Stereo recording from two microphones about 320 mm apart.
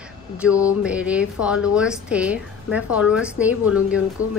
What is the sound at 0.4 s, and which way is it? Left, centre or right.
A woman's voice, centre.